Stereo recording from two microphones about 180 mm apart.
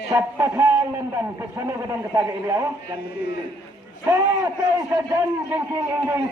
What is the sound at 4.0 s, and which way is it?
A man's voice, 15° right (ahead or behind).